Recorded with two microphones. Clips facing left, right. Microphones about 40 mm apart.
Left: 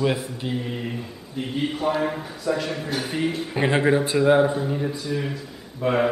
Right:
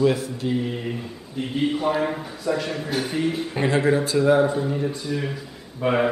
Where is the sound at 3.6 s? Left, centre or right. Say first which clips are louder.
Even; left.